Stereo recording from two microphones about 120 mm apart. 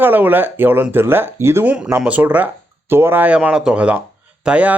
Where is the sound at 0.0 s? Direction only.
15° right (ahead or behind).